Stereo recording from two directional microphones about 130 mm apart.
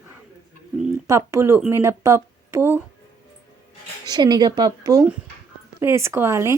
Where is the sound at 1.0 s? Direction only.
20° right (ahead or behind).